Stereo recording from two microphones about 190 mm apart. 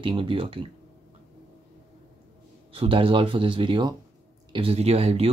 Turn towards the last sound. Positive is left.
turn(degrees=-30)  # may be behind; listen again after turning